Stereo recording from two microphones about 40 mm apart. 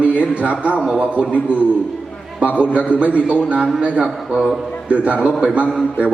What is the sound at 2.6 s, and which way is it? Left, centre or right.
Speech, right.